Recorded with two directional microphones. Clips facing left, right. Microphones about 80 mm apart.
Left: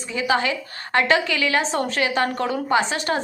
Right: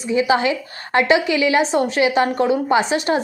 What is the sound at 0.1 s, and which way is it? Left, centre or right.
A woman's voice, right.